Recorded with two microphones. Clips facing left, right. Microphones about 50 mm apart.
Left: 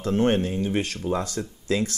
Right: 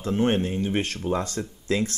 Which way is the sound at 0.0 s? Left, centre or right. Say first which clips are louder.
Left 1 dB; right.